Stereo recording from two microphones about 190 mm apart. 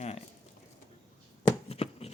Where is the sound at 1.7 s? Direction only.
30° left (ahead or behind).